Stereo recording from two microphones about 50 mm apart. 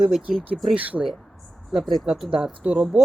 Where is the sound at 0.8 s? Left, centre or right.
Right.